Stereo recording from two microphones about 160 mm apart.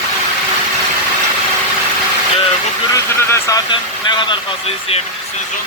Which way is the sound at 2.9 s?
20° left (ahead or behind).